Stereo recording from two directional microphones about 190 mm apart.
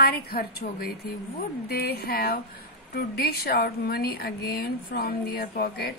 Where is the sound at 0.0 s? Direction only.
55° left (ahead or behind).